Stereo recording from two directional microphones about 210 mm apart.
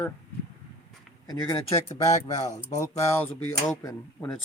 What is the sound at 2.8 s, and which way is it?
Speech, 15° left (ahead or behind).